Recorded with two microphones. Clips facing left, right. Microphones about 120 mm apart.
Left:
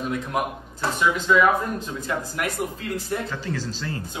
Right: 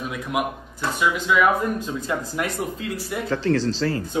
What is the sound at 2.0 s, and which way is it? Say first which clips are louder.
Speech: right 2 dB; 20° right (ahead or behind).